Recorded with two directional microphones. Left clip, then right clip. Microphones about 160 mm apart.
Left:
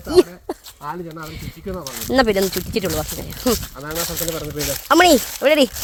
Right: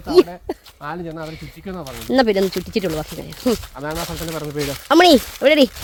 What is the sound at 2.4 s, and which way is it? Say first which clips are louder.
Speech: right 1 dB; 90° left.